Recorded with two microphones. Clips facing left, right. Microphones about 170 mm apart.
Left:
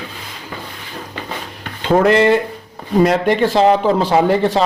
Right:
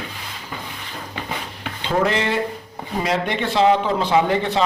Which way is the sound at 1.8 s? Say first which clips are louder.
Left 8 dB; 55° left (ahead or behind).